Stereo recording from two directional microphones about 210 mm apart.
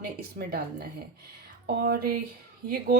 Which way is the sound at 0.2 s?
45° right (ahead or behind).